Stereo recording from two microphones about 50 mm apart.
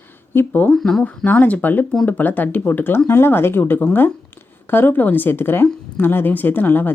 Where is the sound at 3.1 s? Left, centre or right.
Left.